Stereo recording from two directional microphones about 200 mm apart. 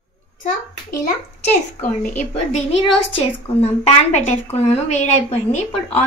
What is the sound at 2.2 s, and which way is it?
A woman's voice, 35° left (ahead or behind).